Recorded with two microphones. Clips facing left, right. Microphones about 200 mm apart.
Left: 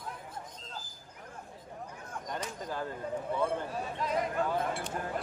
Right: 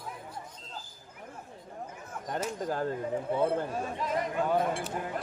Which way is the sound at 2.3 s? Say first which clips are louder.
Right 6 dB; 45° right (ahead or behind).